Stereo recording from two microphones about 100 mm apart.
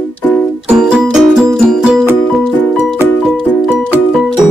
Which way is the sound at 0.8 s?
5° right (ahead or behind).